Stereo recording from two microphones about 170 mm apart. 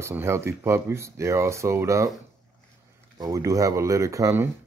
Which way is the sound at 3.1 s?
20° right (ahead or behind).